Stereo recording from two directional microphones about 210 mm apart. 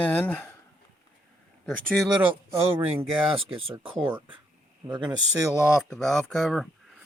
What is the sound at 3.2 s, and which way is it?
Speech, 25° right (ahead or behind).